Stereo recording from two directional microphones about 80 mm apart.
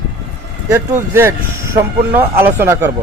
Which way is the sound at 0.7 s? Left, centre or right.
Right.